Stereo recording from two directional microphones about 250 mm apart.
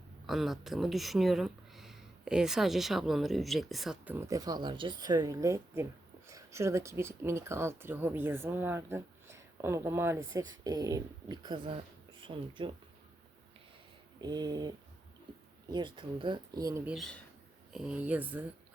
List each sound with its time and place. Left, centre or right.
0.3 s speech: centre
14.2 s speech: centre
15.7 s speech: centre